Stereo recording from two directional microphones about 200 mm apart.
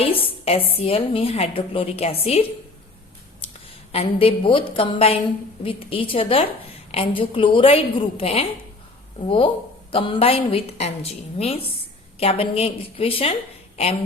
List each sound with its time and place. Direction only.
0.0 s a woman's voice: 25° left (ahead or behind)
3.9 s a woman's voice: 30° left (ahead or behind)